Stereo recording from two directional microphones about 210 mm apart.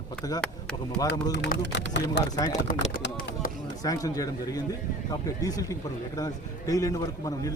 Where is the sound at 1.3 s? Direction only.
55° left (ahead or behind).